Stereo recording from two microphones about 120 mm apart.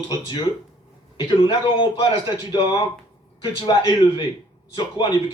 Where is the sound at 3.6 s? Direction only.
40° left (ahead or behind).